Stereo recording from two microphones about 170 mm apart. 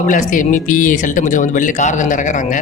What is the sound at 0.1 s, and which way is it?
A man's voice, 50° left (ahead or behind).